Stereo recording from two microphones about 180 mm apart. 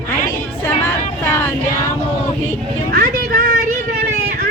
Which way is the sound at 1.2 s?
10° left (ahead or behind).